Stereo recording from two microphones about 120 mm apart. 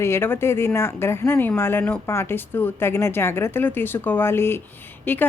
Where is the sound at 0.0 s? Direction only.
20° left (ahead or behind).